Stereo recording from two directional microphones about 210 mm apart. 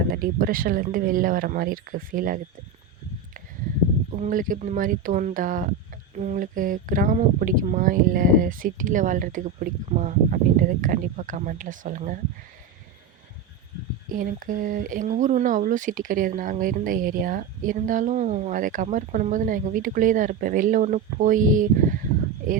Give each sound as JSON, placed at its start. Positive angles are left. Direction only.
{"t": 0.1, "sound": "speech", "side_deg": -40}
{"t": 4.1, "sound": "speech", "side_deg": -40}
{"t": 14.1, "sound": "speech", "side_deg": -40}